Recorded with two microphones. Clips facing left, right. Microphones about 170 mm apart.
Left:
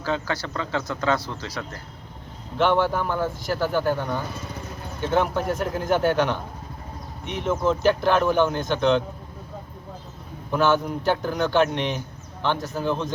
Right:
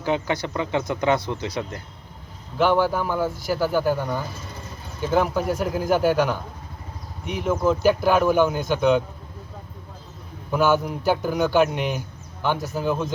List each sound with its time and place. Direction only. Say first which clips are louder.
0.0 s speech: right 3 dB; 20° right (ahead or behind)
2.6 s speech: right 1 dB; 5° right (ahead or behind)
10.5 s speech: right 1 dB; 5° right (ahead or behind)